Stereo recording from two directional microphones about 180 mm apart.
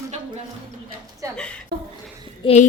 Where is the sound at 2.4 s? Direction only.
35° left (ahead or behind).